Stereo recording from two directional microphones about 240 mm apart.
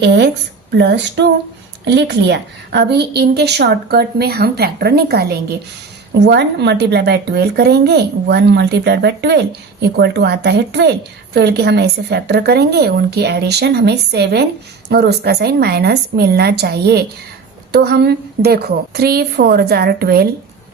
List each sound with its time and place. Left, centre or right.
0.0 s a woman's voice: right